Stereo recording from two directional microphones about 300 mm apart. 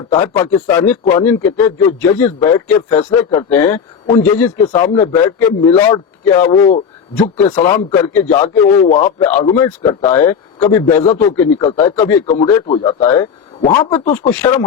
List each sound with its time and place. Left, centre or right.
0.3 s a man's voice: centre
12.6 s a man's voice: centre
13.6 s a man's voice: centre